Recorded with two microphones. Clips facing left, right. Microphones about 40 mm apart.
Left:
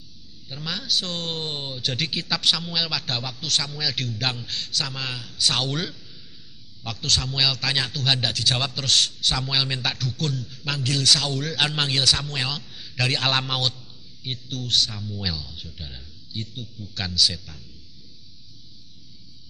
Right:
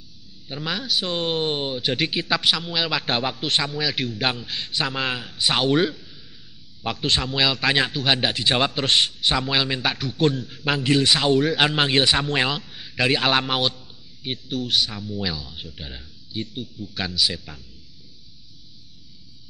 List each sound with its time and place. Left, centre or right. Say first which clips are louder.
0.5 s a man's voice: right 2 dB; centre
2.9 s a man's voice: right 6 dB; right
4.6 s a man's voice: right 6 dB; right